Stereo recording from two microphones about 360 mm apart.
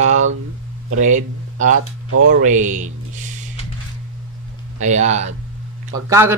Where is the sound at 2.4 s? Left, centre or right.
Right.